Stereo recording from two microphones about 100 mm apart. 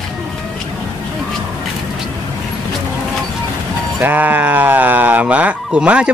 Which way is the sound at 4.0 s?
15° right (ahead or behind).